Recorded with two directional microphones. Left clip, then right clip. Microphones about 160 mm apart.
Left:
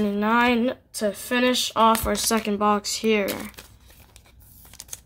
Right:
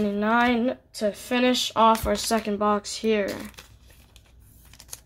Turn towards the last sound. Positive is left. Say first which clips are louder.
# left 2 dB
turn(degrees=5)  # may be behind; listen again after turning